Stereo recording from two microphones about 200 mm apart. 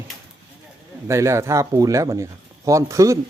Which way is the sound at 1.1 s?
15° right (ahead or behind).